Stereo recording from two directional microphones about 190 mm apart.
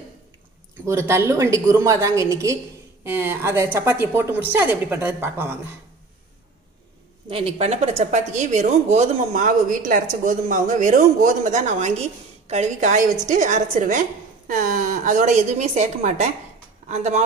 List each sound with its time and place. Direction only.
0.8 s a woman's voice: 15° right (ahead or behind)
7.2 s a woman's voice: 30° right (ahead or behind)